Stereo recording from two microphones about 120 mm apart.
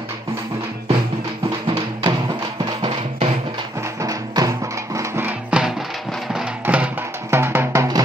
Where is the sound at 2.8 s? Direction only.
45° right (ahead or behind).